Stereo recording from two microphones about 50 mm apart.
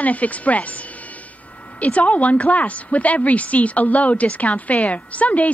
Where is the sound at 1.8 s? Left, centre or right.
Left.